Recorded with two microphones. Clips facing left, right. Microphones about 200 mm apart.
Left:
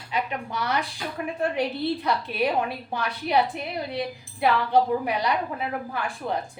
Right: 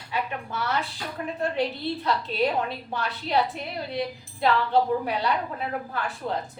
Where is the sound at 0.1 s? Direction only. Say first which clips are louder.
Left 2 dB; 15° left (ahead or behind).